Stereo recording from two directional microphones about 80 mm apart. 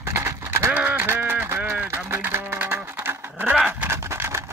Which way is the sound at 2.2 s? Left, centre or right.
Right.